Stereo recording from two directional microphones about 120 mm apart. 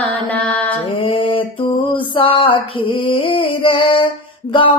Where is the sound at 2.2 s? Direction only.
45° left (ahead or behind).